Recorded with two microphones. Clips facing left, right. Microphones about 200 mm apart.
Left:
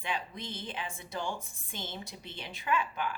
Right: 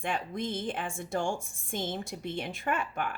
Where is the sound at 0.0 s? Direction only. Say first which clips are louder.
Right 5 dB; 50° right (ahead or behind).